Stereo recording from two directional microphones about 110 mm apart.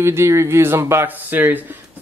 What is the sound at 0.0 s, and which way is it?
Speech, 25° right (ahead or behind).